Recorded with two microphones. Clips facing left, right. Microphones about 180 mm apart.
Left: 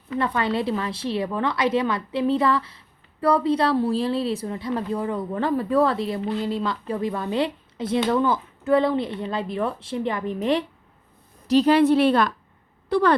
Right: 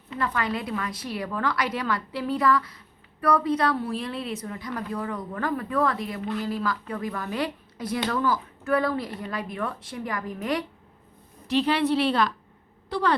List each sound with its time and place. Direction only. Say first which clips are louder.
0.2 s a woman's voice: left 4 dB; 25° left (ahead or behind)
11.4 s a woman's voice: left 7 dB; 40° left (ahead or behind)